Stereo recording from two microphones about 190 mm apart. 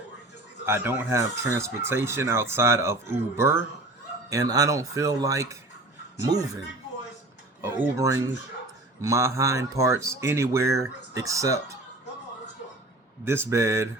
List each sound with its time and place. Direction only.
0.6 s speech: 10° right (ahead or behind)
7.6 s speech: 15° right (ahead or behind)
13.2 s speech: 15° right (ahead or behind)